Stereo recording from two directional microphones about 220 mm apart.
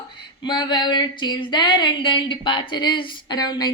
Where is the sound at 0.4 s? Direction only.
20° left (ahead or behind).